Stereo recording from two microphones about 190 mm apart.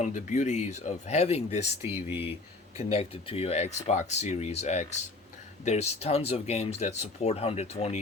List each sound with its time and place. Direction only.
0.0 s speech: 40° left (ahead or behind)
1.8 s speech: 10° right (ahead or behind)
2.7 s speech: 30° left (ahead or behind)